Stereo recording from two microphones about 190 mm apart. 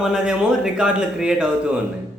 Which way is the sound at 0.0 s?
5° right (ahead or behind).